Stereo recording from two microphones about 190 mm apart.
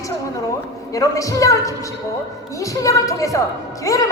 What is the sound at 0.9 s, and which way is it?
Speech, 15° left (ahead or behind).